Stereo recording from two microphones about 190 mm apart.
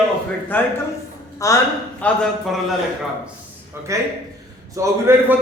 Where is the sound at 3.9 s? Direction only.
15° right (ahead or behind).